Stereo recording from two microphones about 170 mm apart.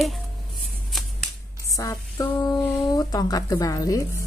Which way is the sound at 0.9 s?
Centre (ahead or behind).